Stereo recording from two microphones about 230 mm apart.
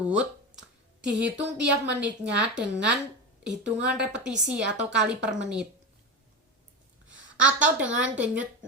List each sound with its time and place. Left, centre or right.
1.0 s a woman's voice: centre
1.4 s speech: right
2.0 s a woman's voice: centre
7.3 s a woman's voice: centre